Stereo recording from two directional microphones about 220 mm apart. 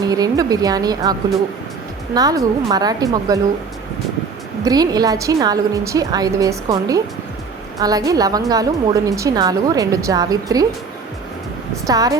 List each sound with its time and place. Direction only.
0.0 s a woman's voice: 15° right (ahead or behind)
2.1 s a woman's voice: 15° right (ahead or behind)
4.6 s a woman's voice: 15° right (ahead or behind)
11.9 s a woman's voice: 15° right (ahead or behind)